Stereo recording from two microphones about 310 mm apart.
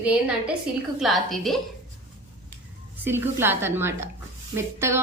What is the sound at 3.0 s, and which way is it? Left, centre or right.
A woman's voice, centre.